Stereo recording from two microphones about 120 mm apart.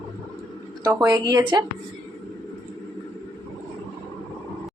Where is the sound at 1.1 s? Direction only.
30° right (ahead or behind).